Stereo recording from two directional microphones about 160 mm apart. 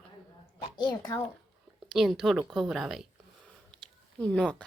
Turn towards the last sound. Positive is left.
turn(degrees=5)  # may be behind; listen again after turning